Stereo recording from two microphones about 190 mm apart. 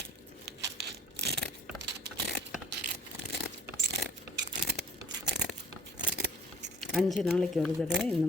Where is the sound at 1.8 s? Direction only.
60° right (ahead or behind).